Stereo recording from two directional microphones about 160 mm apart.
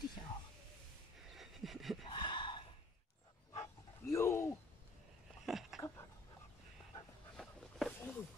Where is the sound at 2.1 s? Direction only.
30° left (ahead or behind).